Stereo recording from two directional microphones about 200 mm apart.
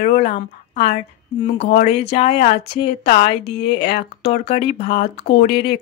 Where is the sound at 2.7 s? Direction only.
55° left (ahead or behind).